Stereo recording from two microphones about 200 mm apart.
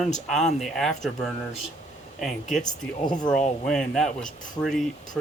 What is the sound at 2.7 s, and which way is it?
Speech, 20° left (ahead or behind).